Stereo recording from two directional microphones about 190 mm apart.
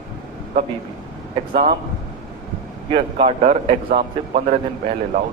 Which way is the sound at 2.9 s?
30° right (ahead or behind).